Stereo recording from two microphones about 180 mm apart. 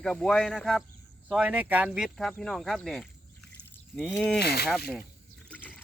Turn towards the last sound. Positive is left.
turn(degrees=5)  # may be behind; listen again after turning